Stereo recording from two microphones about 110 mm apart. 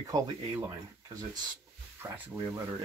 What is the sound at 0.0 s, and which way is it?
Speech, 30° right (ahead or behind).